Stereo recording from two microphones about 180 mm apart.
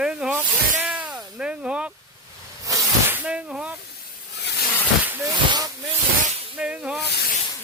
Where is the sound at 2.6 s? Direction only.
20° right (ahead or behind).